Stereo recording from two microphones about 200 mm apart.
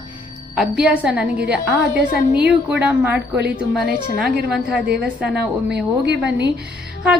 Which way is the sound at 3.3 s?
55° right (ahead or behind).